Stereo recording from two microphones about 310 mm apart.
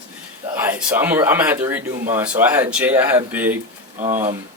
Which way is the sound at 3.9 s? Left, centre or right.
Right.